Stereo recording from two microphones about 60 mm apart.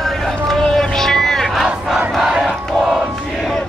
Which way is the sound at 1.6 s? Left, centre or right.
Centre.